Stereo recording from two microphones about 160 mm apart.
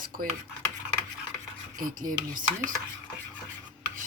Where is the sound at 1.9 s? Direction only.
55° right (ahead or behind).